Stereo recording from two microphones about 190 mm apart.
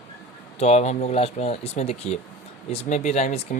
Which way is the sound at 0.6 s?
35° left (ahead or behind).